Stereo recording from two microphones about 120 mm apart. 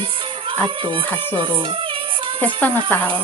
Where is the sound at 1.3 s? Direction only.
45° right (ahead or behind).